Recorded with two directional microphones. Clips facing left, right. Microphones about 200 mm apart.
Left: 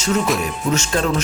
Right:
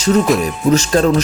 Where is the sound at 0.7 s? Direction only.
35° right (ahead or behind).